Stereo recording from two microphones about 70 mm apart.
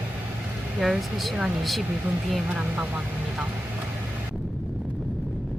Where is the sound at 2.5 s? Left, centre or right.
Centre.